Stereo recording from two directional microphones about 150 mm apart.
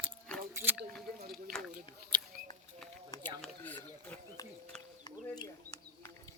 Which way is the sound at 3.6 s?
10° left (ahead or behind).